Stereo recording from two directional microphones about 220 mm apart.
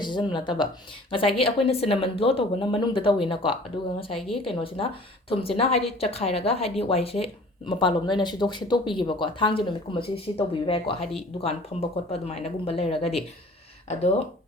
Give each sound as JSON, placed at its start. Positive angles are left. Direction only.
{"t": 0.0, "sound": "speech", "side_deg": 20}